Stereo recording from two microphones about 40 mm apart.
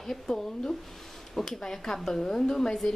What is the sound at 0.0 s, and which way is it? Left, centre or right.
A woman's voice, centre.